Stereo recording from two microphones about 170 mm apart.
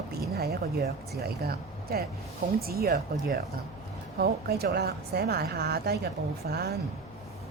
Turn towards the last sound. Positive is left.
turn(degrees=-70)  # may be behind; listen again after turning